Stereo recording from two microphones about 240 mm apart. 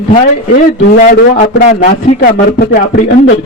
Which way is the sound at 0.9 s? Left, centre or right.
Left.